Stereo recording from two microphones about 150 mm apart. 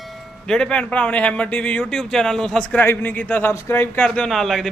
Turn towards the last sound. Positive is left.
turn(degrees=0)  # may be behind; listen again after turning